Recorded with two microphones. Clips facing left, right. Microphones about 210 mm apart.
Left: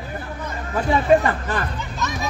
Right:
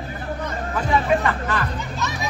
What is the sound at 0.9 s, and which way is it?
Speech, 35° left (ahead or behind).